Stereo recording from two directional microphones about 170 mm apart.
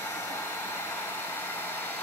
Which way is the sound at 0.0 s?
15° left (ahead or behind).